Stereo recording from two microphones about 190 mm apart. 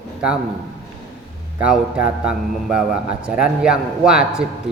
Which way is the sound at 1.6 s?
5° right (ahead or behind).